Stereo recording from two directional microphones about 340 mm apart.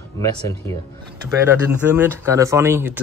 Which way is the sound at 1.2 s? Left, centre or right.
Centre.